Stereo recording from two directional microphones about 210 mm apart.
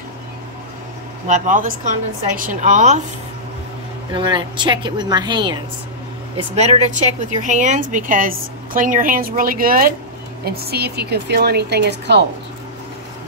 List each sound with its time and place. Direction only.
1.2 s a woman's voice: 35° right (ahead or behind)
4.1 s a woman's voice: 20° right (ahead or behind)
6.3 s a woman's voice: 30° right (ahead or behind); by 12.3 s 55° right (ahead or behind)